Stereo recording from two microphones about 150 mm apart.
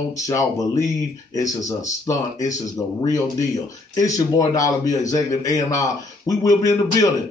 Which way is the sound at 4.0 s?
25° left (ahead or behind).